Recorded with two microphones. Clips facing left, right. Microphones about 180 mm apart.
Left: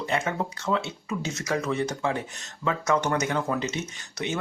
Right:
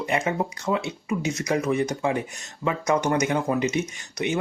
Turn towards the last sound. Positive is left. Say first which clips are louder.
# right 4 dB
turn(degrees=-15)  # may be behind; listen again after turning